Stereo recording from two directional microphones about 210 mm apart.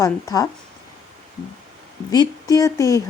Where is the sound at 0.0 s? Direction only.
15° left (ahead or behind).